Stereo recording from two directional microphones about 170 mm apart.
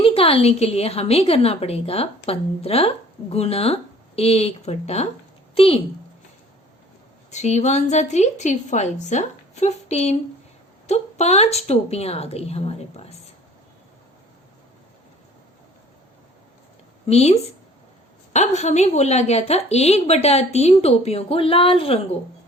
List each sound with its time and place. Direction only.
0.0 s a woman's voice: 35° left (ahead or behind)
7.3 s a woman's voice: 40° left (ahead or behind)
17.1 s a woman's voice: 40° left (ahead or behind)